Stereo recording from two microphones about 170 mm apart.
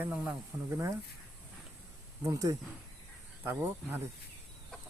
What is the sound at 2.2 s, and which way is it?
Speech, 20° right (ahead or behind).